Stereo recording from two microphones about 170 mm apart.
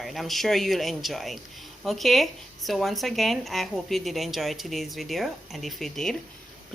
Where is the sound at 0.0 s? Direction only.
Centre (ahead or behind).